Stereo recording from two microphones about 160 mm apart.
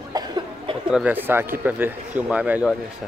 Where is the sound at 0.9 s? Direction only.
10° right (ahead or behind).